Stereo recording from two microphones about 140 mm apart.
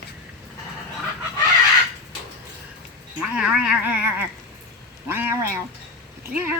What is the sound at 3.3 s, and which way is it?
A woman's voice, 5° right (ahead or behind).